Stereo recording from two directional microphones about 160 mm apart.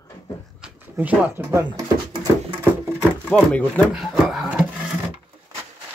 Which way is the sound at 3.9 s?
Centre (ahead or behind).